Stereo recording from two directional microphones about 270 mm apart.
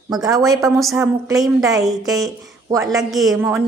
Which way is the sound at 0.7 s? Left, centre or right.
Centre.